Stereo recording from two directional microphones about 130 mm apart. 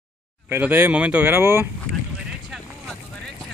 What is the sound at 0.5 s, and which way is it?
Speech, 15° right (ahead or behind).